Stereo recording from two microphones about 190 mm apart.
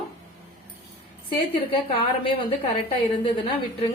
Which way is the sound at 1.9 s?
25° left (ahead or behind).